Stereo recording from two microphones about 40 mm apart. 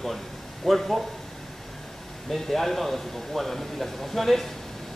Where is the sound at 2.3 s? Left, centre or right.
Centre.